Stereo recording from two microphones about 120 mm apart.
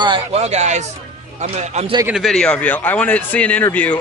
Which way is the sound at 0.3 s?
65° right (ahead or behind).